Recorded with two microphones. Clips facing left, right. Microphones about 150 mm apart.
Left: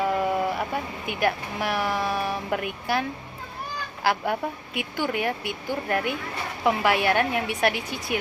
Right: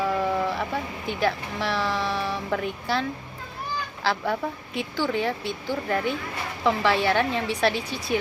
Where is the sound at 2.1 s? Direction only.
50° left (ahead or behind).